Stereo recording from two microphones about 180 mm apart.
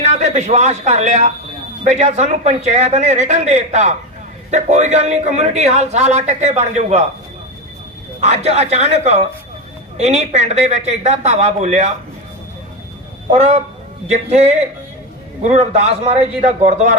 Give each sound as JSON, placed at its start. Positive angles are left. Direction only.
{"t": 0.1, "sound": "a man's voice", "side_deg": -40}
{"t": 8.2, "sound": "a man's voice", "side_deg": -35}
{"t": 13.3, "sound": "a man's voice", "side_deg": -35}